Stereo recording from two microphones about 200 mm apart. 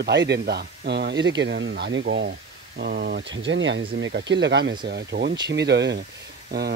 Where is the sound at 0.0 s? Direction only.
60° right (ahead or behind).